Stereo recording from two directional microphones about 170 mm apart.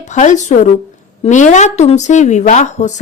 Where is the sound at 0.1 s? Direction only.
45° left (ahead or behind).